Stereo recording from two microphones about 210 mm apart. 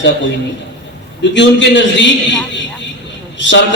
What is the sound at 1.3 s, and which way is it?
Speech, 60° left (ahead or behind).